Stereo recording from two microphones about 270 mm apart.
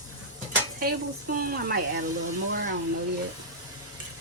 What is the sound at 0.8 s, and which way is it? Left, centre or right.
A woman's voice, right.